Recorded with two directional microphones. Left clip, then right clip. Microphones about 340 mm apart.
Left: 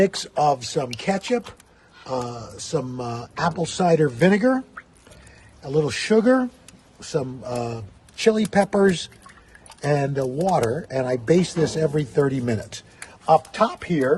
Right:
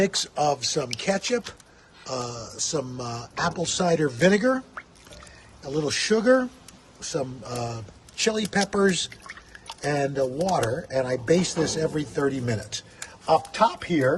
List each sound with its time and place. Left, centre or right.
0.0 s speech: centre
5.6 s speech: centre